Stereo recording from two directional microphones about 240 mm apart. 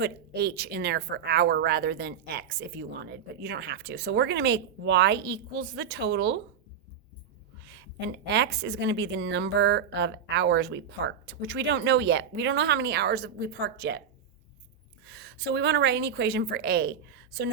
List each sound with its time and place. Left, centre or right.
0.0 s speech: right
7.6 s speech: right
15.0 s a woman's voice: right